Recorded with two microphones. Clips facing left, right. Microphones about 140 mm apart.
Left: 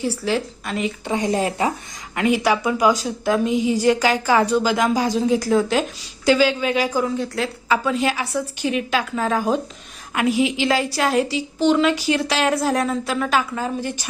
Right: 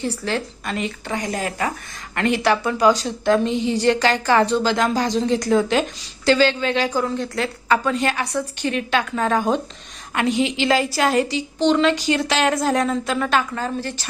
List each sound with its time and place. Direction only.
0.0 s a woman's voice: 10° left (ahead or behind)
1.0 s speech: 25° left (ahead or behind)
2.1 s a woman's voice: 10° left (ahead or behind)